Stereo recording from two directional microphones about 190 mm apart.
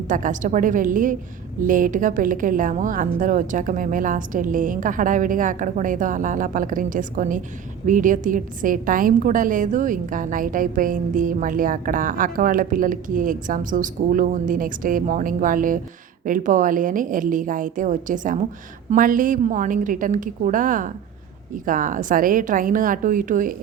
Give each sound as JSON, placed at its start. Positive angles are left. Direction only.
{"t": 0.1, "sound": "a woman's voice", "side_deg": -45}